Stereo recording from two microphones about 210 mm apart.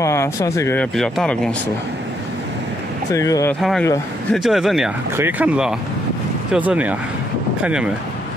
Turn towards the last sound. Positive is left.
turn(degrees=-5)  # may be behind; listen again after turning